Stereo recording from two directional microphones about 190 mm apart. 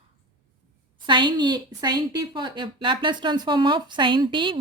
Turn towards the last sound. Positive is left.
turn(degrees=-25)  # may be behind; listen again after turning